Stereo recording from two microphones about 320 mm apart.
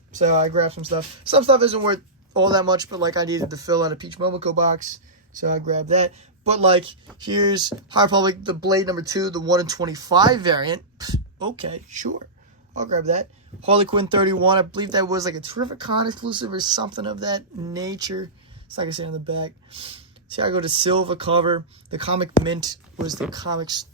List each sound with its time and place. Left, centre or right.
0.1 s speech: right